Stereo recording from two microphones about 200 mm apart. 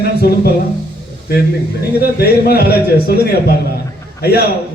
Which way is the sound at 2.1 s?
50° left (ahead or behind).